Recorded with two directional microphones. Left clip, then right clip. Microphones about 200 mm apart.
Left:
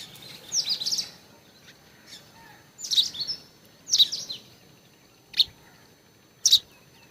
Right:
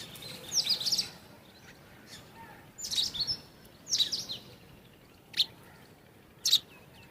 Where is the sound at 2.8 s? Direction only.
Centre (ahead or behind).